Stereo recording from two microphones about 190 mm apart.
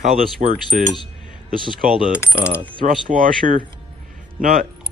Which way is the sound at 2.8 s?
45° right (ahead or behind).